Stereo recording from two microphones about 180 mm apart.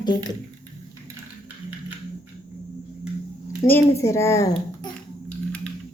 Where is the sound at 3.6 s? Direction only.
15° left (ahead or behind).